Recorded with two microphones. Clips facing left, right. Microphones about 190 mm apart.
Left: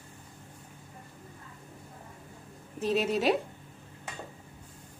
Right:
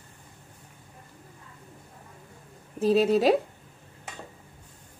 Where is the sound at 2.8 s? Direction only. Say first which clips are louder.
Right 7 dB; 35° right (ahead or behind).